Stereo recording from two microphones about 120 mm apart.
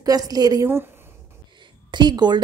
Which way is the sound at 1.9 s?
40° right (ahead or behind).